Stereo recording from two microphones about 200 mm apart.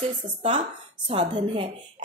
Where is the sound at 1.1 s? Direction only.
25° right (ahead or behind).